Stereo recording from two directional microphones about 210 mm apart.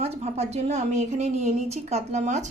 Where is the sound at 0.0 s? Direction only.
30° right (ahead or behind).